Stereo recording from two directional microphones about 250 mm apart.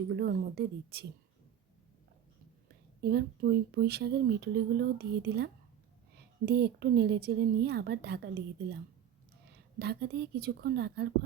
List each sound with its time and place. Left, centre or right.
0.1 s speech: right
3.0 s speech: right